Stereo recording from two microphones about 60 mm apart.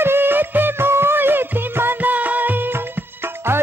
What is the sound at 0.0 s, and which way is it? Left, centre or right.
Music, right.